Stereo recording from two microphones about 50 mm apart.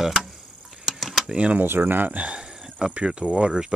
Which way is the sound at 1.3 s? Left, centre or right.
Right.